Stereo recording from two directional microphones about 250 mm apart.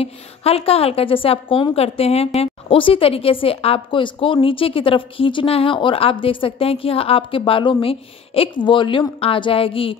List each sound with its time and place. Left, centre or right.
0.0 s a woman's voice: left